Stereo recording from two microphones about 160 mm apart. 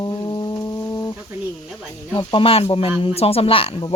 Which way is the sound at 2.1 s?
35° left (ahead or behind).